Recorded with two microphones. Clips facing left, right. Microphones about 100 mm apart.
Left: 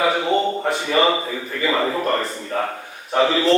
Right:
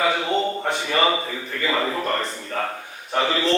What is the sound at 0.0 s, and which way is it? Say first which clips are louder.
A man's voice: left 3 dB; 5° left (ahead or behind).